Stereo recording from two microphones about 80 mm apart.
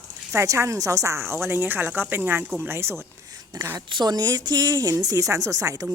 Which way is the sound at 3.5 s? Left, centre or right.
Right.